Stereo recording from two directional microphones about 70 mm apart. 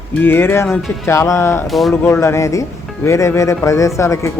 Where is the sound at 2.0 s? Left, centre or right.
Left.